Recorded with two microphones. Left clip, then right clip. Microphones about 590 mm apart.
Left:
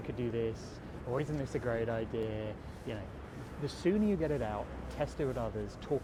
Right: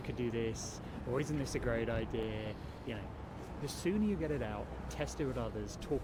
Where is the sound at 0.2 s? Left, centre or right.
Centre.